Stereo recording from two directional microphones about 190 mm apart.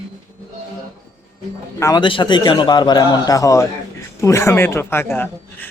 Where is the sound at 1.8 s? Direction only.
25° left (ahead or behind).